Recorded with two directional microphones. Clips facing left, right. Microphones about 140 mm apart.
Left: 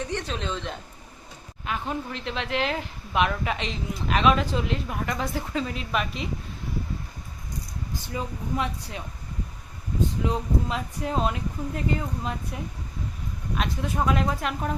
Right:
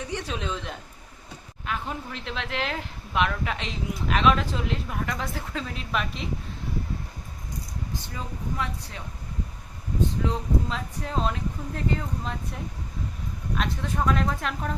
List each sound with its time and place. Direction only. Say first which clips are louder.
0.1 s speech: left 1 dB; 5° right (ahead or behind)
8.1 s speech: left 6 dB; 15° left (ahead or behind)
10.2 s speech: left 1 dB; 10° left (ahead or behind)
13.6 s speech: left 1 dB; 10° left (ahead or behind)